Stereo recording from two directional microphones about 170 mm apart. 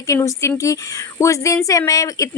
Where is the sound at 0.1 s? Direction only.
20° left (ahead or behind).